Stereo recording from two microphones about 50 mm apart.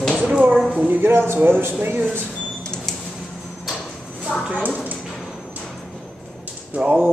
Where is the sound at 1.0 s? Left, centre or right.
Right.